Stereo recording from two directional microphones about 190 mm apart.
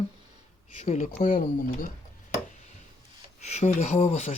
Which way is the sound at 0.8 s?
35° left (ahead or behind).